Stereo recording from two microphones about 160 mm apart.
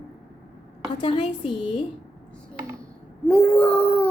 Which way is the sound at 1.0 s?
35° left (ahead or behind).